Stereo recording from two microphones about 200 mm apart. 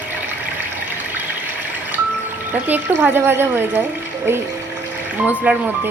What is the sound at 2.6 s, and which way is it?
A woman's voice, 10° right (ahead or behind).